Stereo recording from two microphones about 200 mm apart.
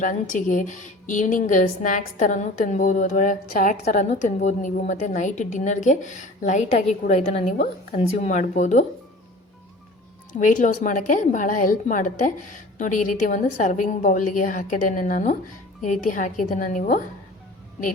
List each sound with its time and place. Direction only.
0.0 s a woman's voice: 40° left (ahead or behind)
10.3 s a woman's voice: 40° left (ahead or behind)